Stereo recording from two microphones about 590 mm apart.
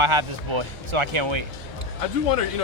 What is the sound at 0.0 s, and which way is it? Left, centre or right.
Speech, right.